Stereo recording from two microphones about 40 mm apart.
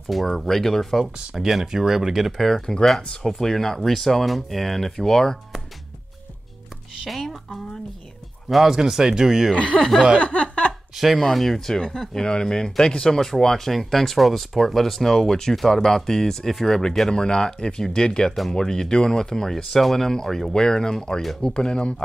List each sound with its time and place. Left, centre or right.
0.1 s speech: centre
1.3 s speech: centre
2.3 s speech: centre
7.1 s speech: centre
8.5 s speech: centre
8.7 s speech: centre
9.5 s speech: left
10.1 s chuckle: left
11.0 s speech: centre; by 21.9 s left